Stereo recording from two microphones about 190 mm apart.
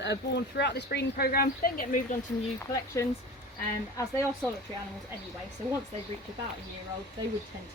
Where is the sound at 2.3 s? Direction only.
10° left (ahead or behind).